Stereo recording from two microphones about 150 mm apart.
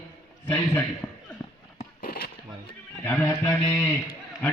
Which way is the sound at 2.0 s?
90° left.